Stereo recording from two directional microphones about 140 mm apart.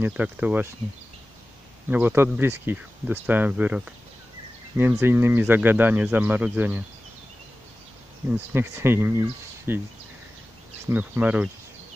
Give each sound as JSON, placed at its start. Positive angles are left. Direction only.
{"t": 0.0, "sound": "speech", "side_deg": -10}
{"t": 1.9, "sound": "speech", "side_deg": -15}
{"t": 8.3, "sound": "speech", "side_deg": -15}
{"t": 10.9, "sound": "speech", "side_deg": -10}